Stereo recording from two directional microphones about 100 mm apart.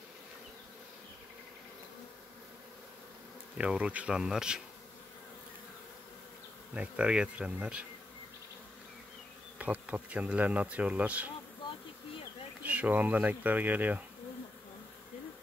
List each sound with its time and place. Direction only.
3.5 s speech: 10° right (ahead or behind)
6.7 s speech: 10° right (ahead or behind)
9.6 s speech: 15° right (ahead or behind)
12.6 s speech: 15° right (ahead or behind)